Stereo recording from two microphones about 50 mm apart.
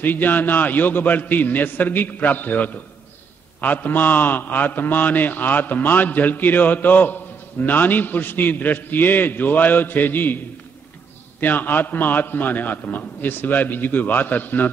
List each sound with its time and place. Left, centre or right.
0.0 s a man's voice: left